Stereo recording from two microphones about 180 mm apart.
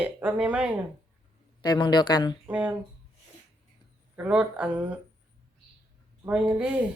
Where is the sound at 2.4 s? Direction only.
10° right (ahead or behind).